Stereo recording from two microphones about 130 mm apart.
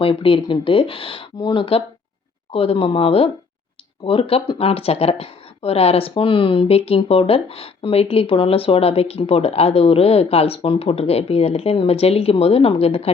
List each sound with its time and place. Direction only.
0.0 s speech: 45° left (ahead or behind)